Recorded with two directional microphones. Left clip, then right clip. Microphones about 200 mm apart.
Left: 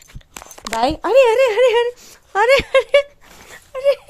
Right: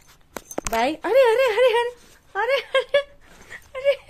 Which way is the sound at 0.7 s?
20° left (ahead or behind).